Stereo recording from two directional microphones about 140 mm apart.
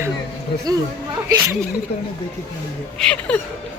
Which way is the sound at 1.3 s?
20° right (ahead or behind).